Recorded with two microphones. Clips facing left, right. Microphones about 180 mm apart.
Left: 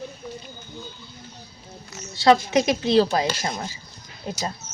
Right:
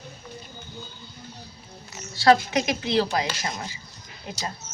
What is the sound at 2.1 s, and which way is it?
Speech, 25° left (ahead or behind).